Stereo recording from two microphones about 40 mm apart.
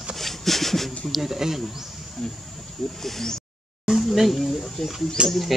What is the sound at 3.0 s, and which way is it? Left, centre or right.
Speech, centre.